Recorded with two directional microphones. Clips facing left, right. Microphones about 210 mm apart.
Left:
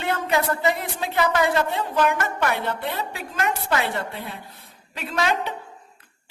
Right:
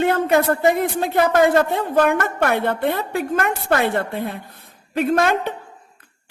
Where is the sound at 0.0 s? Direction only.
50° right (ahead or behind).